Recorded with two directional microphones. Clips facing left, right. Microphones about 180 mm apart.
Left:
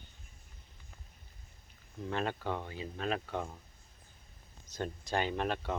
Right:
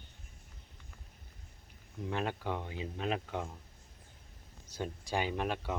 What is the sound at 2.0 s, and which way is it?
Speech, 10° right (ahead or behind).